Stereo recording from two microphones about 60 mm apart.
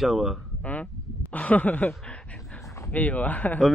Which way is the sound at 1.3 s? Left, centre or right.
Left.